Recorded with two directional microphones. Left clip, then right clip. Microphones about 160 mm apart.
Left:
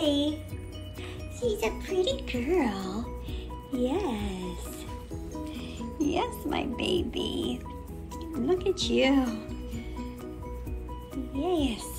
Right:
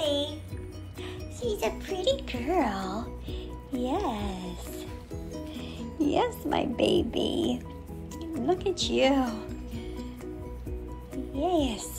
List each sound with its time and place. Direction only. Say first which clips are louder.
0.0 s music: left 1 dB; 5° right (ahead or behind)
1.5 s a child's voice: right 1 dB; 10° right (ahead or behind)
8.2 s music: even; 10° right (ahead or behind)
11.3 s a child's voice: right 2 dB; 10° right (ahead or behind)